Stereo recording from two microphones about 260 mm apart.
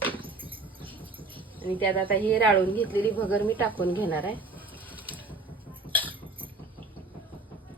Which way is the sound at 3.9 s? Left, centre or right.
Centre.